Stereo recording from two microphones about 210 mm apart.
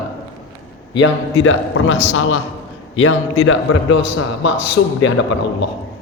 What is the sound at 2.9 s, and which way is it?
A man's voice, 70° left (ahead or behind).